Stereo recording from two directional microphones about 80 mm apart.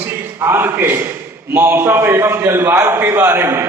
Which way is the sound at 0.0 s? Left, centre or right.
Right.